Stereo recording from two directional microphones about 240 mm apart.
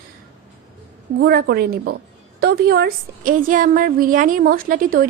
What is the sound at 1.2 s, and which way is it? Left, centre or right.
A woman's voice, right.